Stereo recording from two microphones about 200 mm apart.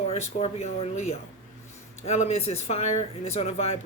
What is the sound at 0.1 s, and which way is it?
Speech, 30° left (ahead or behind).